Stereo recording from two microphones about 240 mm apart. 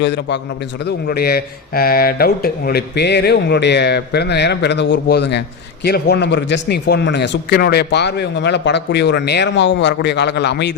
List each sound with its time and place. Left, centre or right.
0.0 s speech: left